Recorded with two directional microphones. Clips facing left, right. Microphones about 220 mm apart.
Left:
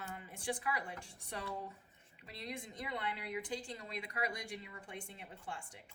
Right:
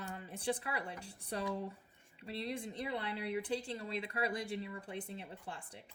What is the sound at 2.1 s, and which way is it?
Speech, 30° right (ahead or behind).